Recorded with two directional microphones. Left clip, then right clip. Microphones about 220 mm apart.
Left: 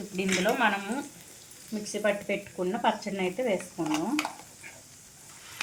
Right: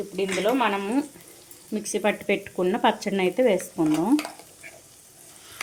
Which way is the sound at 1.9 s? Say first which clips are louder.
Right 4 dB; 50° right (ahead or behind).